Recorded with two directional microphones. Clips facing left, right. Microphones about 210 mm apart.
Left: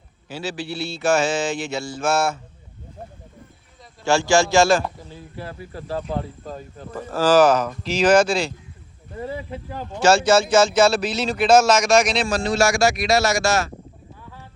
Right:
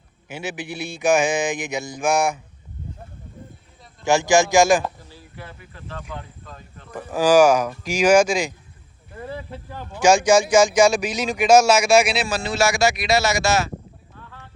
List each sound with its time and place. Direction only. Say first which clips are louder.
0.3 s speech: left 1 dB; 20° right (ahead or behind)
4.0 s speech: right 1 dB; 15° right (ahead or behind)
5.4 s speech: left 7 dB; 35° left (ahead or behind)
6.9 s speech: right 1 dB; 15° right (ahead or behind)
9.3 s speech: left 3 dB; 15° left (ahead or behind)
10.0 s speech: right 1 dB; 15° right (ahead or behind)
14.2 s a sound: right 1 dB; 10° left (ahead or behind)